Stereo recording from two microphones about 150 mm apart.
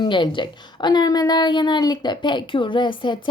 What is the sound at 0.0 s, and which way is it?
A woman's voice, 30° left (ahead or behind).